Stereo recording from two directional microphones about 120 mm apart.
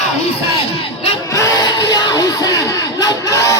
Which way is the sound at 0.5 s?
55° left (ahead or behind).